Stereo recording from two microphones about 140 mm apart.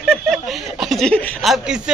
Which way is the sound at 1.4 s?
5° right (ahead or behind).